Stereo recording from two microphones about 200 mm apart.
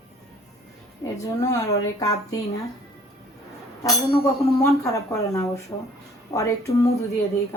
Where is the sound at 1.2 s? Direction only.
15° left (ahead or behind).